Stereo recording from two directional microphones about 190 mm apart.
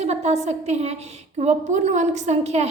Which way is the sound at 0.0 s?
35° right (ahead or behind).